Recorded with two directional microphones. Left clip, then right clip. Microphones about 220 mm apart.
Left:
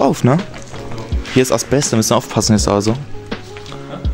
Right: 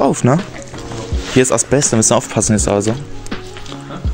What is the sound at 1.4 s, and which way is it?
Speech, 5° left (ahead or behind).